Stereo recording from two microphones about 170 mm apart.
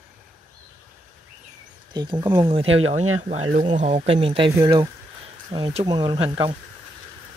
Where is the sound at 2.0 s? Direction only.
25° right (ahead or behind).